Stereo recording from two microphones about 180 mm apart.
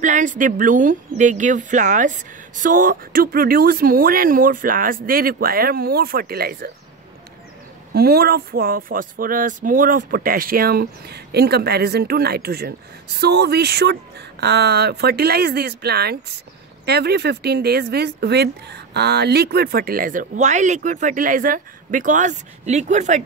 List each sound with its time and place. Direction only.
0.0 s speech: 45° right (ahead or behind)
7.9 s speech: 60° right (ahead or behind); by 23.2 s 40° right (ahead or behind)